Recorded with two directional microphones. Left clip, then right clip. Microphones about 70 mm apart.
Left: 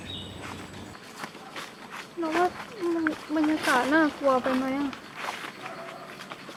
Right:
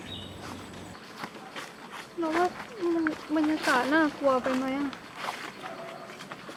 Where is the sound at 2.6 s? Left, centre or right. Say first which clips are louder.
Even; centre.